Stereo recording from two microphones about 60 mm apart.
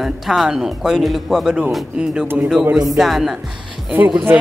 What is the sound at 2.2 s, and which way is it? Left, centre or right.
Speech, right.